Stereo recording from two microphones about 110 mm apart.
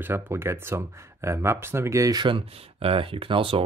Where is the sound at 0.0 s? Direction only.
20° right (ahead or behind).